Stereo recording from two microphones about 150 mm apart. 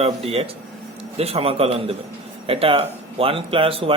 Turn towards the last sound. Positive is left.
turn(degrees=-40)  # may be behind; listen again after turning